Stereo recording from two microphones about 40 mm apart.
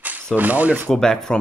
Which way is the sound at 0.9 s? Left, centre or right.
Centre.